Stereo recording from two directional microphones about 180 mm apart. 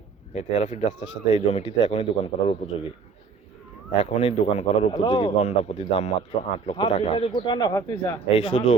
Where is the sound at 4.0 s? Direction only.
35° left (ahead or behind).